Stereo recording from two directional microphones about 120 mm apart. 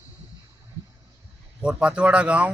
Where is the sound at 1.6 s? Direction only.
10° right (ahead or behind).